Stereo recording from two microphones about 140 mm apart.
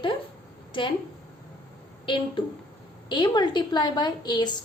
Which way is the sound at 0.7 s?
35° left (ahead or behind).